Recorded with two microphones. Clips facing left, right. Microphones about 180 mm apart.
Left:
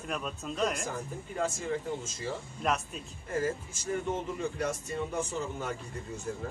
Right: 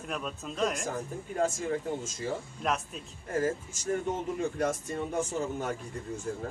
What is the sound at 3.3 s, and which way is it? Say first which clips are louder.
Speech: right 2 dB; 45° right (ahead or behind).